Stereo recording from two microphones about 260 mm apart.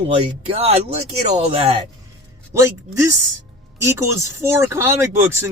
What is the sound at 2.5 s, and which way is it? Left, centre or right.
Speech, centre.